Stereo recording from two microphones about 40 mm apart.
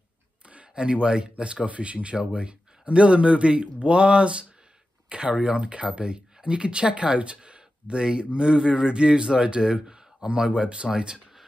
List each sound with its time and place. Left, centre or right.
0.7 s speech: right